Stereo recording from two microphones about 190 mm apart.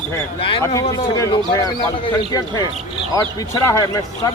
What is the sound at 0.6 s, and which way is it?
A man's voice, 15° left (ahead or behind).